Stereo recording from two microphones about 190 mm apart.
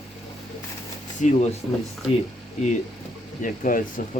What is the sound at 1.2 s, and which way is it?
Speech, 40° left (ahead or behind).